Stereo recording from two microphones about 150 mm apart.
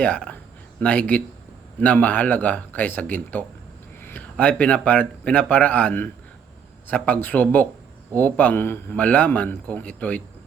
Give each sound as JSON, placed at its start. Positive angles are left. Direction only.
{"t": 0.0, "sound": "a man's voice", "side_deg": 10}